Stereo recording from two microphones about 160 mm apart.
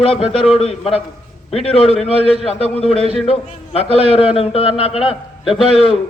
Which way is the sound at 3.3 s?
40° left (ahead or behind).